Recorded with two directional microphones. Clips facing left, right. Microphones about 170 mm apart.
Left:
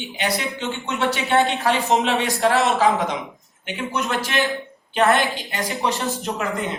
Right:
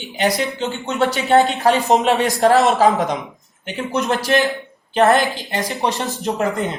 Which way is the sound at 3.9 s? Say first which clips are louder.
Right 6 dB; 40° right (ahead or behind).